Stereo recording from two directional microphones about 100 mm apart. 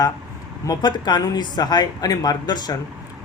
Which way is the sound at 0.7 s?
45° left (ahead or behind).